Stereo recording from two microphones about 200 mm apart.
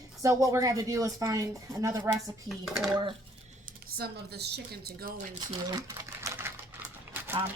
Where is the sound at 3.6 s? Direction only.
50° right (ahead or behind).